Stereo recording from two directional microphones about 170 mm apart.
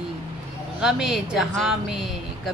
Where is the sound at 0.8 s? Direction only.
5° right (ahead or behind).